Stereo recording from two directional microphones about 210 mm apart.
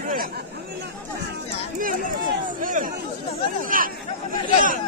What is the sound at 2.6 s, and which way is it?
Chatter, 40° right (ahead or behind).